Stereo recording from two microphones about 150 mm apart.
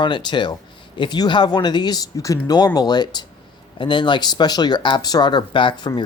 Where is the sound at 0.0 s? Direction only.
30° left (ahead or behind).